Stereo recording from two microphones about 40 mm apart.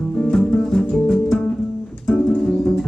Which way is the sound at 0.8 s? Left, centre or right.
Left.